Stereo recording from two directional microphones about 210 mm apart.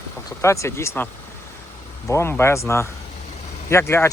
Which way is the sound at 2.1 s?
10° left (ahead or behind).